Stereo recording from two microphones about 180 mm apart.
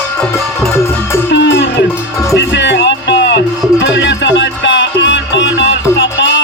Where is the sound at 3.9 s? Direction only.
85° left.